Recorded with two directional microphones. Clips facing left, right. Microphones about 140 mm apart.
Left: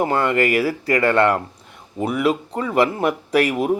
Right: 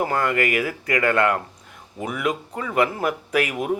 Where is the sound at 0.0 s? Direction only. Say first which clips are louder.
Left 4 dB; 30° left (ahead or behind).